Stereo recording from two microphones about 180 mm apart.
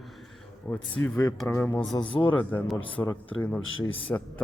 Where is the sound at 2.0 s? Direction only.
25° left (ahead or behind).